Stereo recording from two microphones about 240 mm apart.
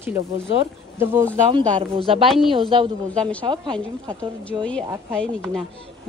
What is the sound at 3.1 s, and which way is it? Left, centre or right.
Speech, centre.